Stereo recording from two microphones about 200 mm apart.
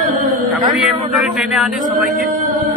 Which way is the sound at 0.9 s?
Centre (ahead or behind).